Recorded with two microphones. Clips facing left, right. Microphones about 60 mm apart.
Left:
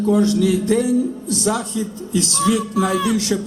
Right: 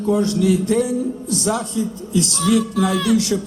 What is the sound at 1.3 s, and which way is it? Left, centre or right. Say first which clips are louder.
Speech: right 2 dB; right.